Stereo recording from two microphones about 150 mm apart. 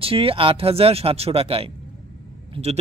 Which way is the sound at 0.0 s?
40° right (ahead or behind).